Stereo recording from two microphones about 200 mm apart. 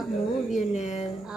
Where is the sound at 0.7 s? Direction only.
35° left (ahead or behind).